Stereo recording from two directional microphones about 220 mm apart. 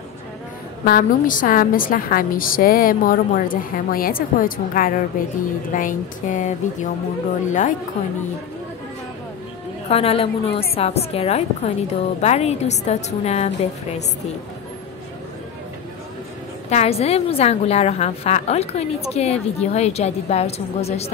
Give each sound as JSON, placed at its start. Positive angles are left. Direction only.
{"t": 0.8, "sound": "a woman's voice", "side_deg": 40}
{"t": 9.8, "sound": "a woman's voice", "side_deg": 25}
{"t": 16.7, "sound": "a woman's voice", "side_deg": 30}